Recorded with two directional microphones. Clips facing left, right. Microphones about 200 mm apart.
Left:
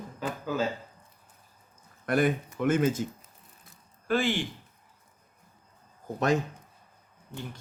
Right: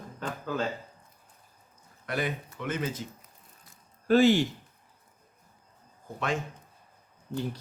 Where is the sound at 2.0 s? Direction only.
50° left (ahead or behind).